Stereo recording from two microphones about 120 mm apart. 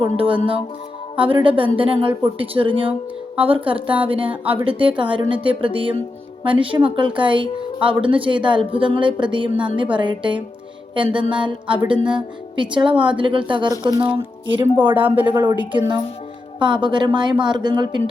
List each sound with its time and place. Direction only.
0.2 s a woman's voice: 50° right (ahead or behind)
14.9 s speech: 15° right (ahead or behind)
15.5 s a woman's voice: 40° right (ahead or behind)